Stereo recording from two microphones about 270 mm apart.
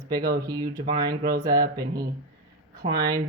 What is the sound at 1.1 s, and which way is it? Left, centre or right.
Speech, right.